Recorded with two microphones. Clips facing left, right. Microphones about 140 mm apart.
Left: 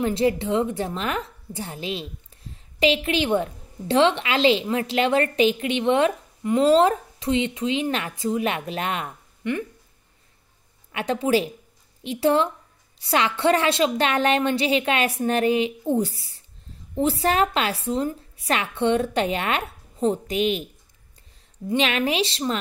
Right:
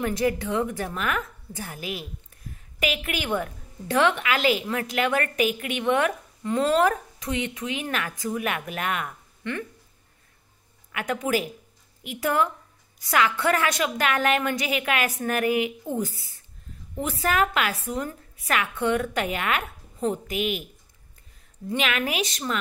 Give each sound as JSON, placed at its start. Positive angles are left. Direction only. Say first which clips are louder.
{"t": 0.0, "sound": "a woman's voice", "louder": "left 3 dB", "side_deg": 25}
{"t": 9.4, "sound": "speech", "louder": "left 5 dB", "side_deg": 15}
{"t": 10.9, "sound": "a woman's voice", "louder": "left 4 dB", "side_deg": 30}
{"t": 21.6, "sound": "a woman's voice", "louder": "left 4 dB", "side_deg": 30}